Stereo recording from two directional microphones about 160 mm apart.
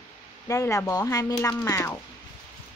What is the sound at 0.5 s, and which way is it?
Speech, 20° left (ahead or behind).